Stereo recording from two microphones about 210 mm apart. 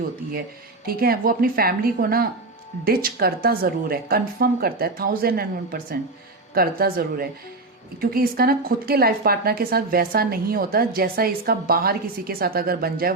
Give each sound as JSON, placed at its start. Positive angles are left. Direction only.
{"t": 0.9, "sound": "a woman's voice", "side_deg": -45}